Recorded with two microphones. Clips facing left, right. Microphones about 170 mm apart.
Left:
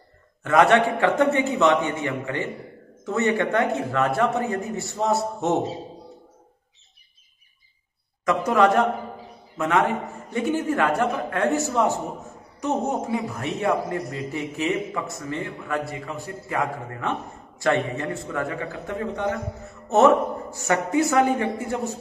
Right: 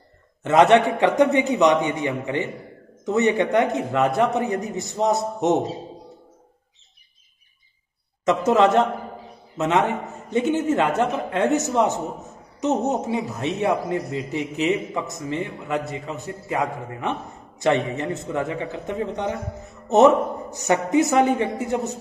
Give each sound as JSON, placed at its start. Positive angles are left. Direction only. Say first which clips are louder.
{"t": 0.4, "sound": "a man's voice", "louder": "right 2 dB", "side_deg": -20}
{"t": 8.3, "sound": "a man's voice", "louder": "right 2 dB", "side_deg": -25}